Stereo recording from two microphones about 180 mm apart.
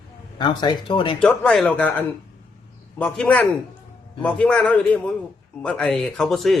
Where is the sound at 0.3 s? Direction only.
25° left (ahead or behind).